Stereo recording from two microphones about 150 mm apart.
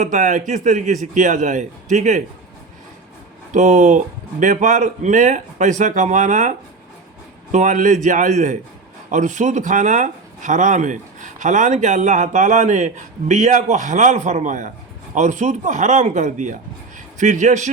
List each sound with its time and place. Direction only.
0.0 s speech: 55° right (ahead or behind)
3.5 s speech: 55° right (ahead or behind)